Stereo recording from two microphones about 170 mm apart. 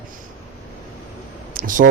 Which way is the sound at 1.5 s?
55° right (ahead or behind).